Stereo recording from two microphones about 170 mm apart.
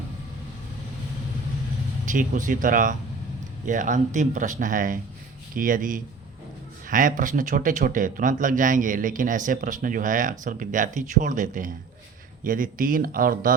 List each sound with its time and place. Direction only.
2.0 s speech: 50° right (ahead or behind)